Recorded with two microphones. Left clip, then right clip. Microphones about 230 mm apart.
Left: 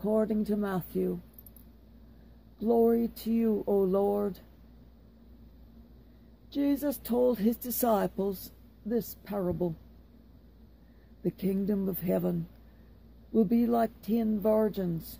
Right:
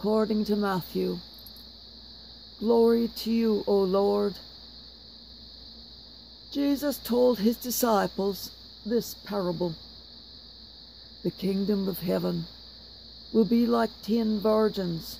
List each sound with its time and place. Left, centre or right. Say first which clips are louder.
0.0 s speech: right 3 dB; right
2.6 s speech: right 3 dB; right
6.5 s speech: right 2 dB; right
11.2 s speech: right 3 dB; right